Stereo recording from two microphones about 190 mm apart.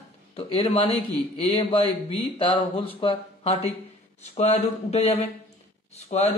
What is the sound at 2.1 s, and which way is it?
Speech, 30° left (ahead or behind).